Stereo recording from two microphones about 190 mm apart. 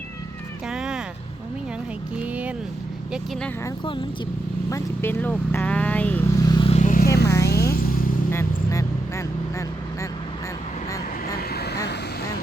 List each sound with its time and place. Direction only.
0.7 s music: 5° right (ahead or behind)
2.2 s speech: 5° right (ahead or behind)
4.7 s speech: 10° left (ahead or behind)
6.4 s vehicle: 25° left (ahead or behind)
6.7 s vehicle: 45° left (ahead or behind)
7.3 s a sound: 15° left (ahead or behind)
7.5 s vehicle: 55° left (ahead or behind)
8.3 s vehicle: 15° left (ahead or behind)
11.3 s vehicle: 55° left (ahead or behind)